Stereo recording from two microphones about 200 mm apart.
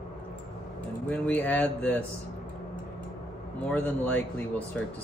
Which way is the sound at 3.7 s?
10° left (ahead or behind).